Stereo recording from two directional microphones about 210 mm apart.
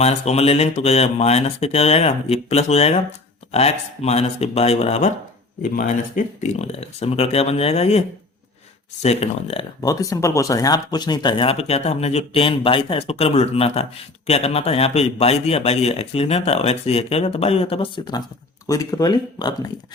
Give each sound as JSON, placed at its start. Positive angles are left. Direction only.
{"t": 0.0, "sound": "speech", "side_deg": 30}